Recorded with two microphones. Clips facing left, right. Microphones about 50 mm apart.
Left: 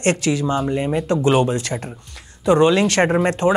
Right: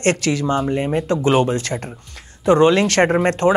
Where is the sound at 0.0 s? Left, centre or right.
Right.